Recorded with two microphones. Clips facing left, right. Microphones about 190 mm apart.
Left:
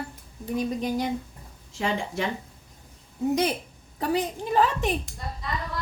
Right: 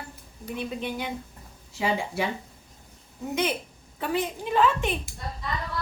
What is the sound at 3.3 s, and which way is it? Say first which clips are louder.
A woman's voice: right 1 dB; 35° left (ahead or behind).